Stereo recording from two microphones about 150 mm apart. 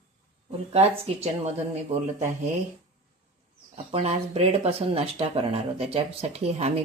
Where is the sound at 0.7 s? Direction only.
45° right (ahead or behind).